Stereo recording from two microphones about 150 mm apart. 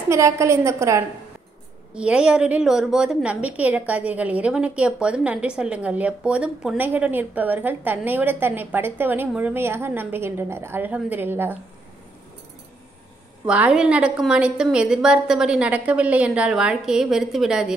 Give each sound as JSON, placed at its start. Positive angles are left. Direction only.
{"t": 0.1, "sound": "a woman's voice", "side_deg": -20}
{"t": 2.0, "sound": "a woman's voice", "side_deg": -5}
{"t": 13.5, "sound": "a woman's voice", "side_deg": -5}